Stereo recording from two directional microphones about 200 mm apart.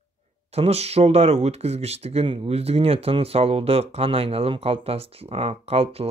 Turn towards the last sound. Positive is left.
turn(degrees=-30)  # may be behind; listen again after turning